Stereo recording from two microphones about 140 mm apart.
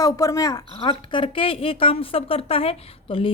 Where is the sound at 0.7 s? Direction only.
35° left (ahead or behind).